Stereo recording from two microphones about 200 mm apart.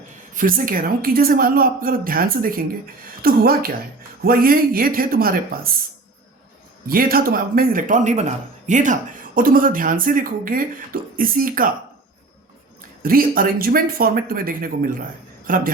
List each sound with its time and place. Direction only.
0.3 s speech: 45° right (ahead or behind)
6.8 s speech: 45° right (ahead or behind)
13.0 s a man's voice: 45° right (ahead or behind)